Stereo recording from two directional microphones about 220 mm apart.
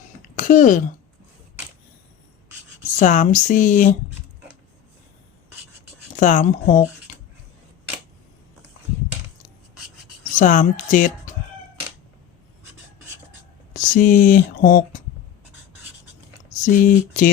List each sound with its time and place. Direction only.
0.3 s speech: 35° left (ahead or behind)
3.0 s speech: 35° left (ahead or behind)
6.1 s speech: 35° left (ahead or behind)
10.3 s speech: 35° left (ahead or behind)
13.7 s speech: 35° left (ahead or behind)
16.6 s speech: 40° left (ahead or behind)